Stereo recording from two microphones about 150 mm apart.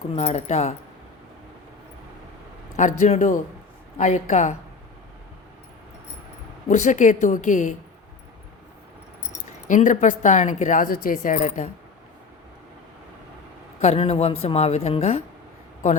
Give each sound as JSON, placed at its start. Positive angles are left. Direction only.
{"t": 0.2, "sound": "a woman's voice", "side_deg": 45}
{"t": 2.7, "sound": "a woman's voice", "side_deg": 50}
{"t": 6.7, "sound": "speech", "side_deg": 50}
{"t": 9.6, "sound": "speech", "side_deg": 55}
{"t": 13.8, "sound": "a woman's voice", "side_deg": 40}